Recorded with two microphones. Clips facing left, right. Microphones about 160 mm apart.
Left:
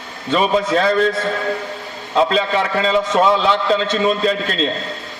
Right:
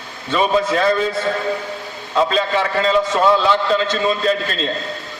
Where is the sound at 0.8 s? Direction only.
Centre (ahead or behind).